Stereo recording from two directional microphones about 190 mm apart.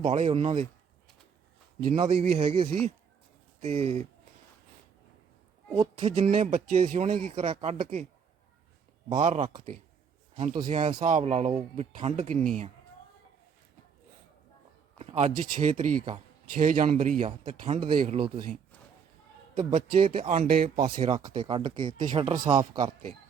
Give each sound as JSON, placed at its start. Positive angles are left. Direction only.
{"t": 0.0, "sound": "speech", "side_deg": -30}
{"t": 1.8, "sound": "speech", "side_deg": -45}
{"t": 2.0, "sound": "speech", "side_deg": -30}
{"t": 5.7, "sound": "speech", "side_deg": -30}
{"t": 7.3, "sound": "speech", "side_deg": -30}
{"t": 9.1, "sound": "speech", "side_deg": -35}
{"t": 14.9, "sound": "a sound", "side_deg": -35}
{"t": 15.3, "sound": "speech", "side_deg": -40}
{"t": 19.5, "sound": "speech", "side_deg": -35}
{"t": 20.8, "sound": "speech", "side_deg": -30}